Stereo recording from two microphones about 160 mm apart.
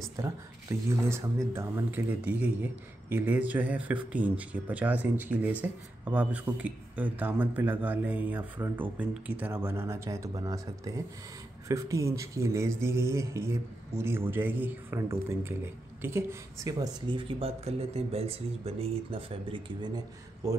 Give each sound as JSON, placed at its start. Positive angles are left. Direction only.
{"t": 0.2, "sound": "speech", "side_deg": -15}